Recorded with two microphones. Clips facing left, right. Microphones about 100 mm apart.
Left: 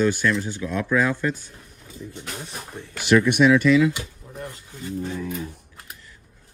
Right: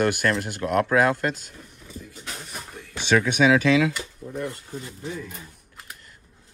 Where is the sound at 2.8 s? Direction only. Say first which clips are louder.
Left 4 dB; 30° left (ahead or behind).